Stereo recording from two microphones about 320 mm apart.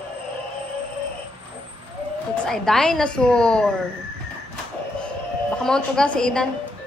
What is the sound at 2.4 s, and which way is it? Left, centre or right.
A woman's voice, centre.